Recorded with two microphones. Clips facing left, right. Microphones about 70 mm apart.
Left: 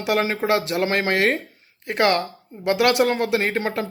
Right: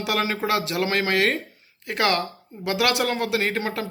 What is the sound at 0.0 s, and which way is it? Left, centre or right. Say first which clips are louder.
Speech: left 3 dB; left.